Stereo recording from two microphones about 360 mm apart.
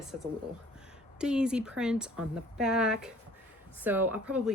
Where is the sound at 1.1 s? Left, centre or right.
Centre.